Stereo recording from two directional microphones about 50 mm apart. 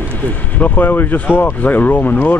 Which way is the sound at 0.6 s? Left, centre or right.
Left.